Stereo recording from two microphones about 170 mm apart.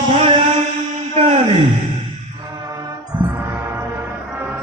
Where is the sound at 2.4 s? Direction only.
20° right (ahead or behind).